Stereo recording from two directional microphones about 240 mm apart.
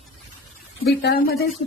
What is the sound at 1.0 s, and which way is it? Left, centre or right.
Speech, left.